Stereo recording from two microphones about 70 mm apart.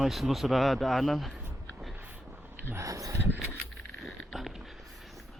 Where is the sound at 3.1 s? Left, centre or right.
Right.